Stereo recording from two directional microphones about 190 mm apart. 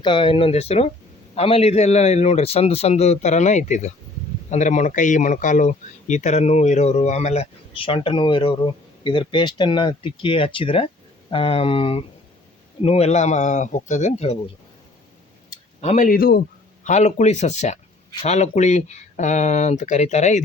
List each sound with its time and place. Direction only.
0.0 s speech: 25° left (ahead or behind)
15.8 s speech: 40° left (ahead or behind)
16.8 s speech: 40° left (ahead or behind)